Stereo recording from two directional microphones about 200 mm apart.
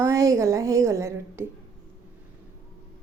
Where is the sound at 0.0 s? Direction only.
15° right (ahead or behind).